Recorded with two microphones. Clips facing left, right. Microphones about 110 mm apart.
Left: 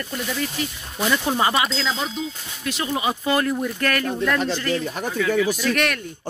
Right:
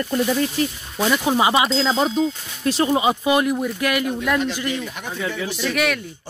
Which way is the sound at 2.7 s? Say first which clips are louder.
Right 7 dB; 35° right (ahead or behind).